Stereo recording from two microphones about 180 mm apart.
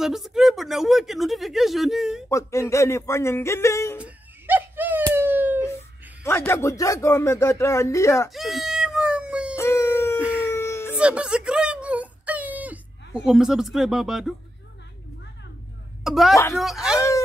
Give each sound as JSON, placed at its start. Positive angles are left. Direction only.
{"t": 0.0, "sound": "speech", "side_deg": 0}
{"t": 2.2, "sound": "speech", "side_deg": 15}
{"t": 4.0, "sound": "a sound", "side_deg": -10}
{"t": 6.2, "sound": "speech", "side_deg": 15}
{"t": 8.3, "sound": "cat", "side_deg": 0}
{"t": 9.6, "sound": "howl", "side_deg": 15}
{"t": 10.4, "sound": "baby cry", "side_deg": 15}
{"t": 11.0, "sound": "a sound", "side_deg": -5}
{"t": 16.0, "sound": "speech", "side_deg": 0}